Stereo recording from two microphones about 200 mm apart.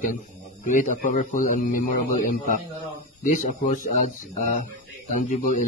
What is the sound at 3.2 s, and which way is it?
A man's voice, 40° left (ahead or behind).